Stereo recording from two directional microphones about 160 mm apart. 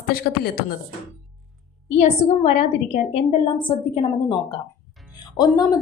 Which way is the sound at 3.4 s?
30° left (ahead or behind).